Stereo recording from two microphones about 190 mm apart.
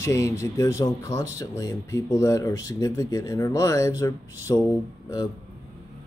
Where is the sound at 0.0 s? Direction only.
15° left (ahead or behind).